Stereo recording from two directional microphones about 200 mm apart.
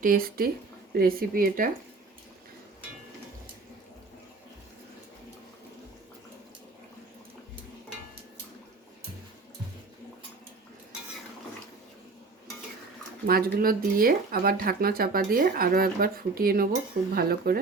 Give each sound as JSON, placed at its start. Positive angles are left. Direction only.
{"t": 0.0, "sound": "speech", "side_deg": -45}
{"t": 13.2, "sound": "speech", "side_deg": -45}